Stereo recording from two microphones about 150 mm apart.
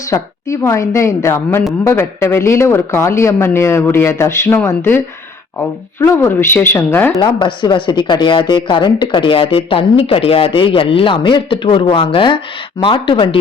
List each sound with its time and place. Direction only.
0.1 s a woman's voice: 20° left (ahead or behind)
7.2 s speech: 30° left (ahead or behind)